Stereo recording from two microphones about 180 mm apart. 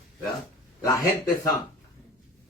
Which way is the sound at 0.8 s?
20° left (ahead or behind).